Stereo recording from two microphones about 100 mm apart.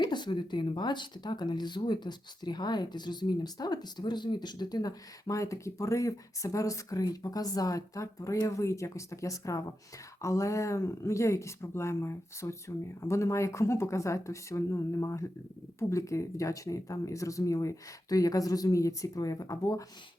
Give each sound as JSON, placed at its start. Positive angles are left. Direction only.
{"t": 0.1, "sound": "speech", "side_deg": 50}